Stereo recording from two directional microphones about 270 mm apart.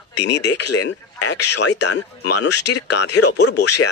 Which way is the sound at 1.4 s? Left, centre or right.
Left.